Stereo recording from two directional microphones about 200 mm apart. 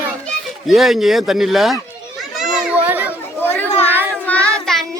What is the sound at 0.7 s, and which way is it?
Speech, centre (ahead or behind).